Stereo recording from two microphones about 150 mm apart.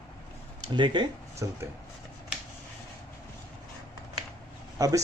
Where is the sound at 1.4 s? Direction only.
20° right (ahead or behind).